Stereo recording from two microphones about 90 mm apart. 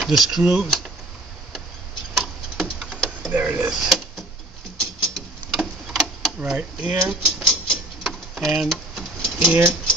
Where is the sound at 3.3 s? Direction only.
15° right (ahead or behind).